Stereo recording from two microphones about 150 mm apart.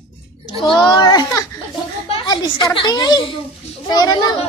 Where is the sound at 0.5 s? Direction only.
35° left (ahead or behind).